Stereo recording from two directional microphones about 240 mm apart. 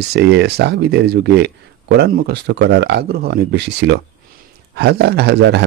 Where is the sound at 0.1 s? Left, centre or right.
Right.